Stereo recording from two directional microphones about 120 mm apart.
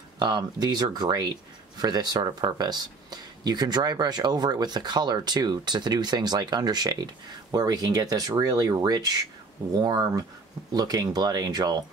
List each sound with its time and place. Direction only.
0.2 s speech: 35° right (ahead or behind)